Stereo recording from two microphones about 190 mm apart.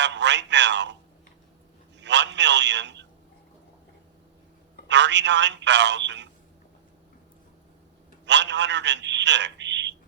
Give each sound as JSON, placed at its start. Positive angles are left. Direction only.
{"t": 0.0, "sound": "speech", "side_deg": -65}
{"t": 2.0, "sound": "a man's voice", "side_deg": -65}
{"t": 4.9, "sound": "speech", "side_deg": -65}
{"t": 8.2, "sound": "a man's voice", "side_deg": -65}